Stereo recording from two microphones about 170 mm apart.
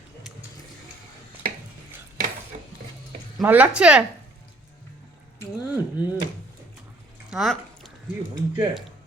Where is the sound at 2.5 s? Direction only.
45° right (ahead or behind).